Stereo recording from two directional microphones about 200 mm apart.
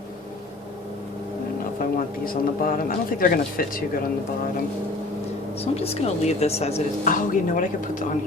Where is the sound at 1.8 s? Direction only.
45° left (ahead or behind).